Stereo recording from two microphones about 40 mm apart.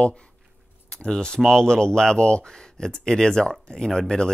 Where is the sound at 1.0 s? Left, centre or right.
Centre.